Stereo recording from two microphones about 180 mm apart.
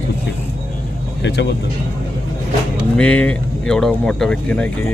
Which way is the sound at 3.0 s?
5° left (ahead or behind).